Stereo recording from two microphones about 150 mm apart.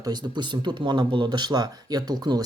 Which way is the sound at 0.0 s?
30° right (ahead or behind).